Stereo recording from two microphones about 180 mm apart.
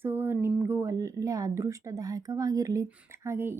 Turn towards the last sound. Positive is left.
turn(degrees=-15)  # may be behind; listen again after turning